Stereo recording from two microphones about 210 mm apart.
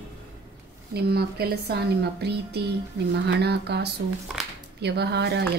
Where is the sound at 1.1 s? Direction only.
50° right (ahead or behind).